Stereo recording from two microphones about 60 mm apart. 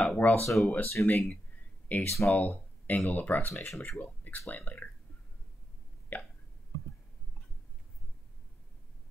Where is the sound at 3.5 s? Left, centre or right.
Centre.